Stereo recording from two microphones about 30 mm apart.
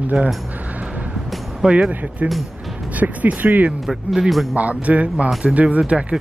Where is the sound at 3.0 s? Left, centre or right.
Right.